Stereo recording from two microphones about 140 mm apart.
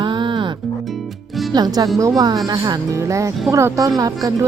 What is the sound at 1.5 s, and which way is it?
Speech, 30° right (ahead or behind).